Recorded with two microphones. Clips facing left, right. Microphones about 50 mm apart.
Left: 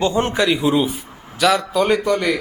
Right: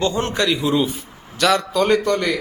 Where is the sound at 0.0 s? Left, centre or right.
Left.